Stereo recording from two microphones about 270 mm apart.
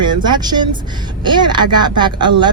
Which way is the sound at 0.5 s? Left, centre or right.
Right.